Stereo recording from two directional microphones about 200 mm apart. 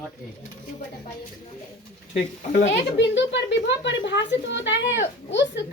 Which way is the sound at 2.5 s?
65° left (ahead or behind).